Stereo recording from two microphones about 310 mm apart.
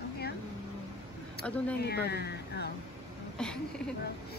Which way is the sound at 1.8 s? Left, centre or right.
Left.